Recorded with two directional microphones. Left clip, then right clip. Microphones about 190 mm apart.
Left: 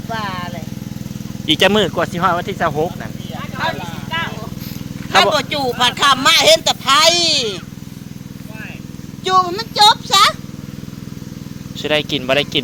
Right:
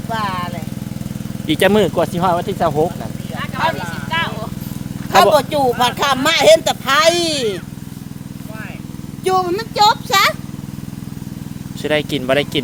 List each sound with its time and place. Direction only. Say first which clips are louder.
0.1 s vehicle: right 3 dB; 10° right (ahead or behind)
1.5 s speech: even; centre (ahead or behind)
5.1 s speech: right 2 dB; 35° right (ahead or behind); by 7.6 s 60° right (ahead or behind)
9.2 s speech: left 2 dB; 65° right (ahead or behind)
11.8 s speech: left 1 dB; 10° right (ahead or behind)